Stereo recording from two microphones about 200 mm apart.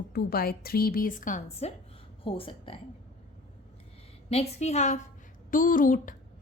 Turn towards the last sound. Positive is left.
turn(degrees=40)  # may be behind; listen again after turning